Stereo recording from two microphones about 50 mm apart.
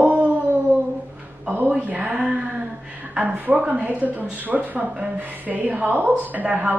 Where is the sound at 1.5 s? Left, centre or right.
Right.